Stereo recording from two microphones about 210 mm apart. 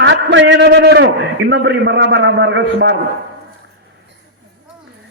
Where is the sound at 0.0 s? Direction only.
55° right (ahead or behind).